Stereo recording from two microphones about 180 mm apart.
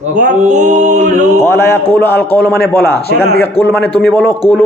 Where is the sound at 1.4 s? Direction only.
15° left (ahead or behind).